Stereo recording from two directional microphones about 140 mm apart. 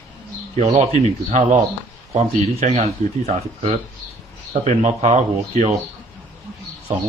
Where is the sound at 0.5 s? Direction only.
50° right (ahead or behind).